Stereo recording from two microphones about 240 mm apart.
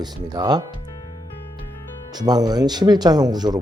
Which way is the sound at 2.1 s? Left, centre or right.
Centre.